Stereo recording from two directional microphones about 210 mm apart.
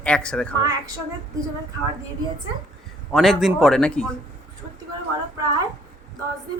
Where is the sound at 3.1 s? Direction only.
Centre (ahead or behind).